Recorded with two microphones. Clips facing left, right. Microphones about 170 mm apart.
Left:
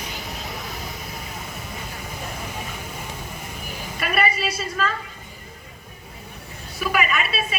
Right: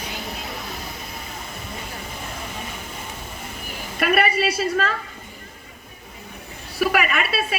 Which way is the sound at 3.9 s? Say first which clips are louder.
Right 4 dB; 60° right (ahead or behind).